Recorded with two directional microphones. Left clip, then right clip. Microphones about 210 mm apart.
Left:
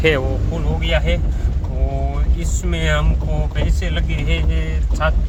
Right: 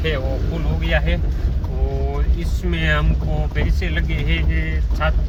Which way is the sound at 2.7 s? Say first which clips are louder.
Even; 15° left (ahead or behind).